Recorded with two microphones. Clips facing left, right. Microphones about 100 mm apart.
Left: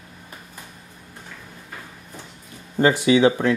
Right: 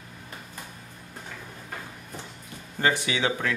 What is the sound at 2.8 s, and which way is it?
Speech, 30° left (ahead or behind).